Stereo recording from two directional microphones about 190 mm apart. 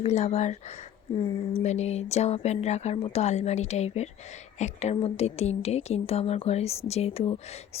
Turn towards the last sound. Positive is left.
turn(degrees=30)  # may be behind; listen again after turning